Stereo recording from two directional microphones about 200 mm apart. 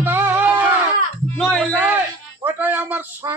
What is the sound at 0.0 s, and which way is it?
Music, 10° right (ahead or behind).